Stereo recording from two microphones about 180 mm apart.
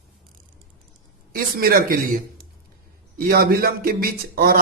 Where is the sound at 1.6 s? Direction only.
50° right (ahead or behind).